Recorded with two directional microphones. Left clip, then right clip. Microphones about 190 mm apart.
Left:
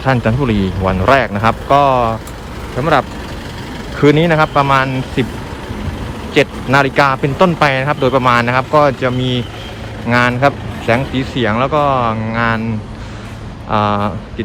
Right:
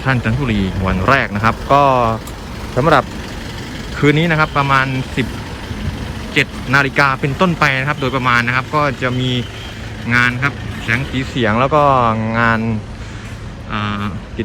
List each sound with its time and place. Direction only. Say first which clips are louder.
0.0 s speech: left 4 dB; 15° left (ahead or behind)
3.9 s speech: left 3 dB; 15° left (ahead or behind)
6.3 s speech: left 2 dB; 15° left (ahead or behind)
11.4 s speech: right 2 dB; 5° left (ahead or behind)
13.7 s speech: left 8 dB; 25° left (ahead or behind)